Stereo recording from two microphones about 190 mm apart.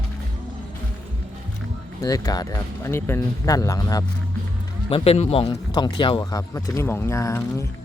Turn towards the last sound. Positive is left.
turn(degrees=15)  # may be behind; listen again after turning